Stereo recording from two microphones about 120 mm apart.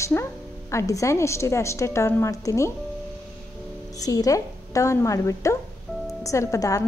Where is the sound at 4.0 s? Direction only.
30° left (ahead or behind).